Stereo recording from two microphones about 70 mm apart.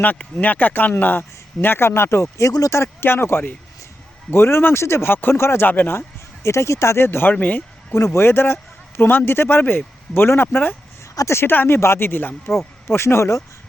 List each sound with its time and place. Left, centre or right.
0.0 s speech: left
2.5 s speech: left
2.7 s speech: left
7.9 s speech: left